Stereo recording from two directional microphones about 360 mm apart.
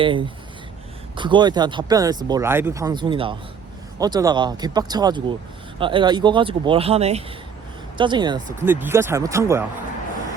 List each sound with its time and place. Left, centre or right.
0.0 s speech: centre